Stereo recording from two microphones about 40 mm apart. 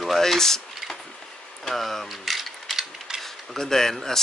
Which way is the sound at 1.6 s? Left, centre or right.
Centre.